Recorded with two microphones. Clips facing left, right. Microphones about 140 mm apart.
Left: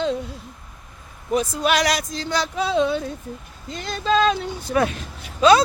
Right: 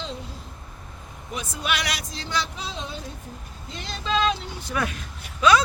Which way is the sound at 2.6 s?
60° left (ahead or behind).